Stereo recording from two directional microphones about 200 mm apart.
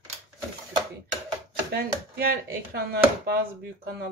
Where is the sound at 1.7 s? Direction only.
50° right (ahead or behind).